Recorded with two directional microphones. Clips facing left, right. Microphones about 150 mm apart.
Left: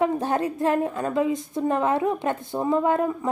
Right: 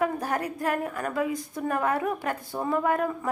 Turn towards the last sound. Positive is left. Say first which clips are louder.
# left 4 dB
turn(degrees=20)  # may be behind; listen again after turning